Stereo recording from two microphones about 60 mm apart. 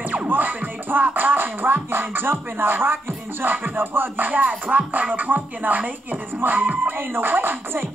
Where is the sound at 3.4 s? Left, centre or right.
Right.